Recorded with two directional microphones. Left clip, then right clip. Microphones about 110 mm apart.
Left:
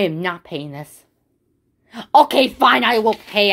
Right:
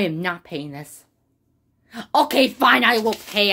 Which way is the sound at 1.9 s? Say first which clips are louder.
Left 6 dB; 20° left (ahead or behind).